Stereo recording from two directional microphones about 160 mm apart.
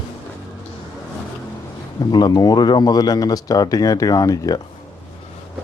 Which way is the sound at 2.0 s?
25° left (ahead or behind).